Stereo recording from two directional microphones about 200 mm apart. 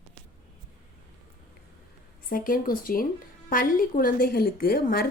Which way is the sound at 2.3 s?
45° left (ahead or behind).